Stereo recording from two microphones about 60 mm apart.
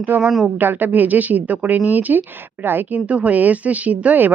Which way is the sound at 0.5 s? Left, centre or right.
Right.